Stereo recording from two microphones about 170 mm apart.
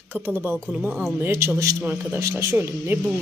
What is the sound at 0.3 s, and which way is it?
Speech, 10° right (ahead or behind).